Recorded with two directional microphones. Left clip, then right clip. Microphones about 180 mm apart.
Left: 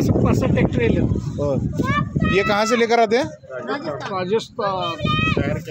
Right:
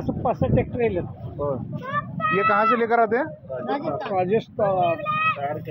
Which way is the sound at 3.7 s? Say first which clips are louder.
Even; 30° left (ahead or behind).